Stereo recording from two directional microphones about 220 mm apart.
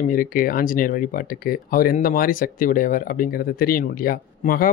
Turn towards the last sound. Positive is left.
turn(degrees=40)  # may be behind; listen again after turning